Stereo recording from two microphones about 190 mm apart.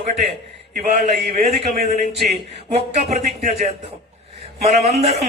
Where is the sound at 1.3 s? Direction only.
30° right (ahead or behind).